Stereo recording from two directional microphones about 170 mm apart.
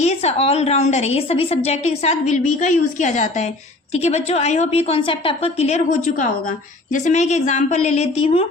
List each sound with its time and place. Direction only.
0.0 s a woman's voice: 40° left (ahead or behind)